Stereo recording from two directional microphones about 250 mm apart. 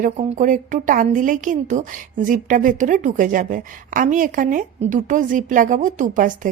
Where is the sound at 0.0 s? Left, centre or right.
Right.